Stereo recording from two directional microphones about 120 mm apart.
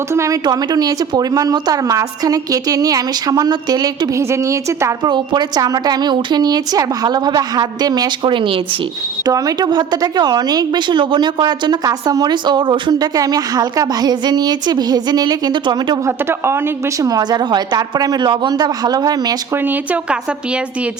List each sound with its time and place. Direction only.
0.1 s a woman's voice: 25° right (ahead or behind)
5.0 s a woman's voice: 40° right (ahead or behind)
9.2 s a woman's voice: 30° right (ahead or behind)
16.0 s a woman's voice: 20° right (ahead or behind)
19.5 s a woman's voice: 15° right (ahead or behind)